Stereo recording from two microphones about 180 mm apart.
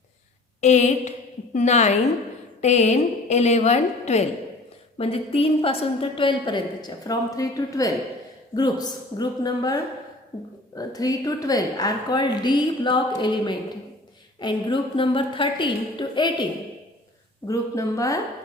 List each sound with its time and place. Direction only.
0.6 s a woman's voice: 40° left (ahead or behind); by 9.7 s 20° left (ahead or behind)
10.8 s a woman's voice: 20° left (ahead or behind)
17.5 s speech: 15° left (ahead or behind)